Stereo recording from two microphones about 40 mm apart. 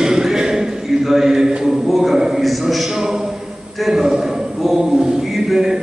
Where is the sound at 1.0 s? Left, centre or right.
Centre.